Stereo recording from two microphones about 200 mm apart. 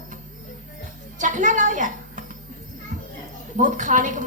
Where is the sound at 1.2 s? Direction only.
40° right (ahead or behind).